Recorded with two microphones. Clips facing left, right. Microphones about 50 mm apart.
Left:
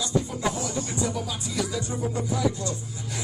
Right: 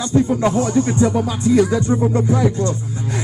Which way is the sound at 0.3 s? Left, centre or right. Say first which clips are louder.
Right 12 dB; right.